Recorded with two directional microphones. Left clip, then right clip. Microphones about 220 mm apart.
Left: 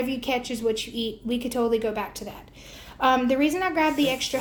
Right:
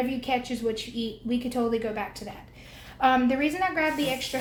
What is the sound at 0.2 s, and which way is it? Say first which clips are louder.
A woman's voice: left 1 dB; 45° left (ahead or behind).